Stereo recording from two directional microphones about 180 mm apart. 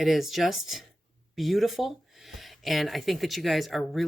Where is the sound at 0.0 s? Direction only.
Centre (ahead or behind).